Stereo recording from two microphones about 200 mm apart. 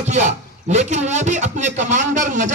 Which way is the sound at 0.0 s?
35° right (ahead or behind).